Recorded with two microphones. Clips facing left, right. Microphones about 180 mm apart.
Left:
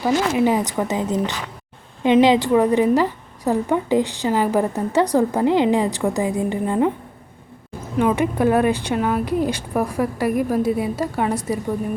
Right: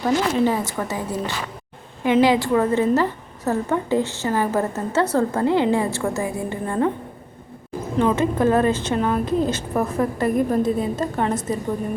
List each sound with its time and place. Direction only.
0.0 s a woman's voice: 15° left (ahead or behind)
7.9 s a woman's voice: 15° left (ahead or behind)